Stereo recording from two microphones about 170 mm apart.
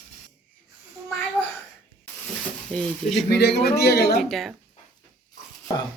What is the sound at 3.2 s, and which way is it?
Speech, 75° left (ahead or behind).